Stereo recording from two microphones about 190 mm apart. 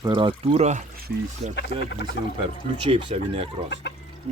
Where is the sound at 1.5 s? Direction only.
65° left (ahead or behind).